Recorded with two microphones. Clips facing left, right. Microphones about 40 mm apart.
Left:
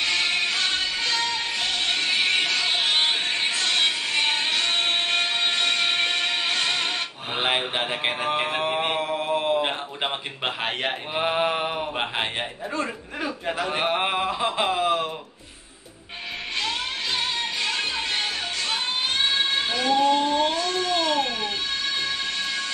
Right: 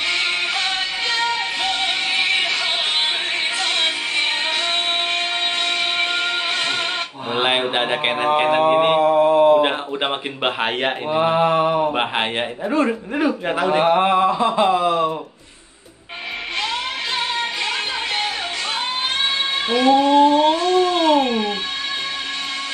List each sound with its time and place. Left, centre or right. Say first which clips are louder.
0.0 s music: right 3 dB; right
5.7 s music: right 2 dB; centre
7.3 s mantra: right 5 dB; right
9.2 s mantra: right 11 dB; centre
9.6 s speech: right 7 dB; right
11.1 s mantra: right 7 dB; centre
12.7 s a man's voice: right 11 dB; right
13.7 s mantra: right 9 dB; centre
14.4 s speech: right 7 dB; centre
19.7 s cat: right 8 dB; right